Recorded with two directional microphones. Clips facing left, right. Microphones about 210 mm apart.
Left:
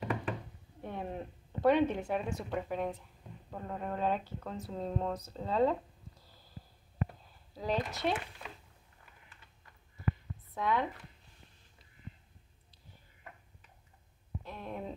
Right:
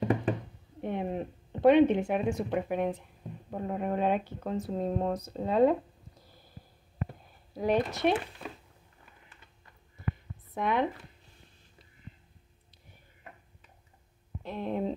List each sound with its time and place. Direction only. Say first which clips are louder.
0.7 s a woman's voice: right 7 dB; 20° right (ahead or behind)
7.5 s speech: right 7 dB; 60° right (ahead or behind)
7.8 s speech: right 6 dB; 20° right (ahead or behind)
10.5 s speech: right 4 dB; 20° right (ahead or behind)
14.4 s speech: right 10 dB; 25° right (ahead or behind)